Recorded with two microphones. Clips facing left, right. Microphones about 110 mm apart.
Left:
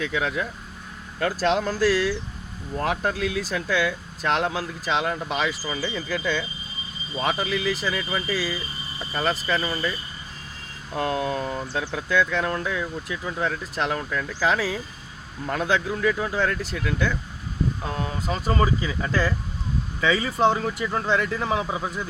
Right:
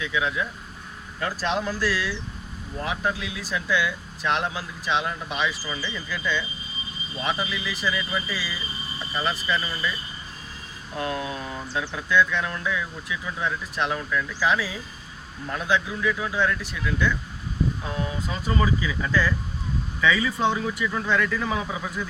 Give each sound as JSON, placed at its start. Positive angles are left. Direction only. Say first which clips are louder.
{"t": 0.0, "sound": "speech", "louder": "left 1 dB", "side_deg": 55}
{"t": 2.8, "sound": "speech", "louder": "left 3 dB", "side_deg": 55}
{"t": 10.9, "sound": "speech", "louder": "left 4 dB", "side_deg": 45}
{"t": 18.6, "sound": "speech", "louder": "left 1 dB", "side_deg": 35}